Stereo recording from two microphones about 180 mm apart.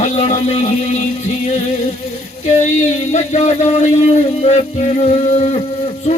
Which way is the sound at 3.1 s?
40° left (ahead or behind).